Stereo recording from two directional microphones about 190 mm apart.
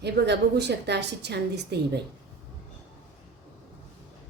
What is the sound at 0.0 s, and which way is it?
A woman's voice, 60° right (ahead or behind).